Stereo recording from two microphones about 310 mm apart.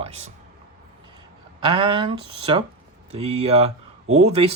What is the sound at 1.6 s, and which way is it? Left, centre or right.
Speech, centre.